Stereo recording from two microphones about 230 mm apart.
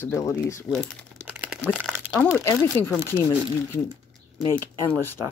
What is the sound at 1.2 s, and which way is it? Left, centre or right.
Crumpling, centre.